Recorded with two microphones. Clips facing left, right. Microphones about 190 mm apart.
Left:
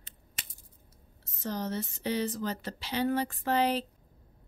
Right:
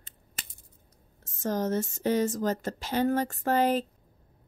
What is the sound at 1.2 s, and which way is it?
A woman's voice, 45° right (ahead or behind).